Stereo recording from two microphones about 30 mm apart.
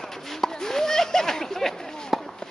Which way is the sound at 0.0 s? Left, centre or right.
Centre.